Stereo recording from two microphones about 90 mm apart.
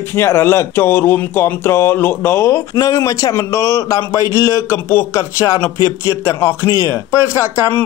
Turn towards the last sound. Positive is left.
turn(degrees=30)  # may be behind; listen again after turning